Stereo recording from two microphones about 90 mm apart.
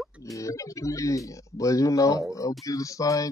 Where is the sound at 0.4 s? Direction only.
35° left (ahead or behind).